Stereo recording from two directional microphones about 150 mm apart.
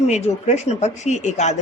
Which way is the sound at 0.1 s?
50° left (ahead or behind).